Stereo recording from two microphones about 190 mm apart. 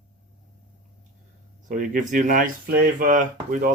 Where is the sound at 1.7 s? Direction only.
45° right (ahead or behind).